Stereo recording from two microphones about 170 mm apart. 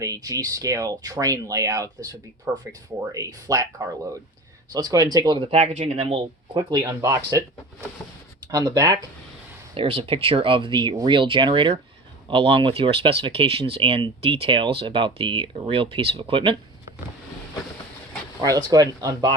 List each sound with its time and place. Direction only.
0.0 s speech: 20° right (ahead or behind)
4.7 s speech: 20° right (ahead or behind)
9.7 s speech: 35° right (ahead or behind)
18.4 s speech: 20° right (ahead or behind)